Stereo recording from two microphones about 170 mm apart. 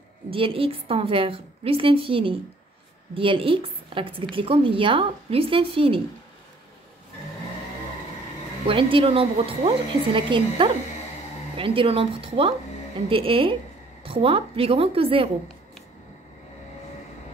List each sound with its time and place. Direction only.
0.3 s a woman's voice: 30° right (ahead or behind)
8.9 s a woman's voice: 35° right (ahead or behind)